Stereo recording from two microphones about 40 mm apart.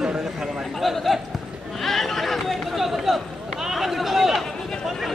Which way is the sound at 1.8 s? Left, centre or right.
Centre.